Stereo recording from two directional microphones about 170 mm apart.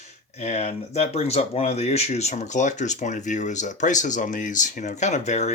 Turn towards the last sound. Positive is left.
turn(degrees=40)  # may be behind; listen again after turning